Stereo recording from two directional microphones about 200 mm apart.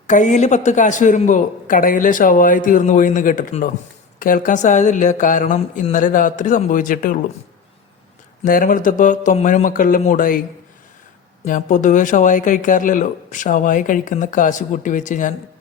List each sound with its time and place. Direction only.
0.1 s speech: 40° left (ahead or behind)
8.4 s speech: 45° left (ahead or behind)
11.4 s speech: 40° left (ahead or behind)